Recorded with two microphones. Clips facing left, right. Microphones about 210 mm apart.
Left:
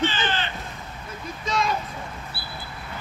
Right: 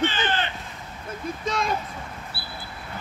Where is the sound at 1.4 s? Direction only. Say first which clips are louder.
Left 2 dB; 55° right (ahead or behind).